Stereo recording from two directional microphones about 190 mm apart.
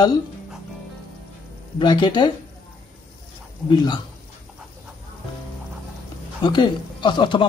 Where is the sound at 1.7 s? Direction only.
25° left (ahead or behind).